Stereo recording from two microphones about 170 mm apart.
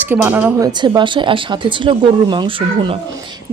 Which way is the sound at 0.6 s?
25° right (ahead or behind).